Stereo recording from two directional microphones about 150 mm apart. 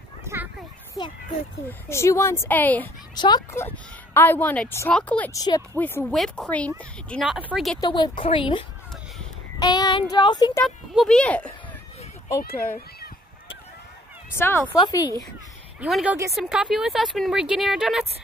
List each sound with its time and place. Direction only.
0.2 s a sound: 15° right (ahead or behind)
1.7 s speech: 20° left (ahead or behind)
3.2 s child singing: 25° left (ahead or behind)
3.5 s speech: 15° left (ahead or behind)
5.3 s child singing: 25° left (ahead or behind)
5.8 s speech: 15° left (ahead or behind)
6.0 s speech: centre (ahead or behind)
7.2 s speech: 10° right (ahead or behind)
7.8 s a woman's voice: 30° left (ahead or behind)
9.6 s child singing: 25° left (ahead or behind)
10.6 s speech: 5° left (ahead or behind)
14.3 s speech: 15° left (ahead or behind)
14.8 s child singing: 25° left (ahead or behind)
15.9 s speech: 5° right (ahead or behind)